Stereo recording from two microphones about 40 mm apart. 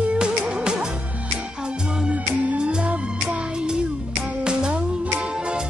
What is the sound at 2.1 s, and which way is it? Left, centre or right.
Music, right.